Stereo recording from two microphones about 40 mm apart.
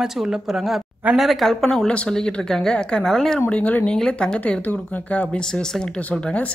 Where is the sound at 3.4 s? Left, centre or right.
Left.